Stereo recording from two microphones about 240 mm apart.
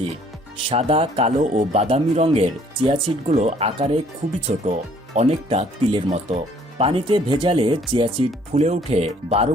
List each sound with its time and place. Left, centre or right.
0.7 s speech: right